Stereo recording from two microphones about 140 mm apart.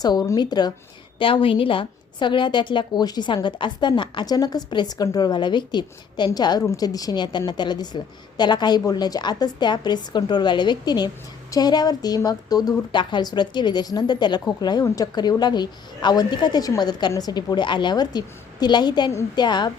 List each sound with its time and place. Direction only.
0.0 s a woman's voice: 30° left (ahead or behind)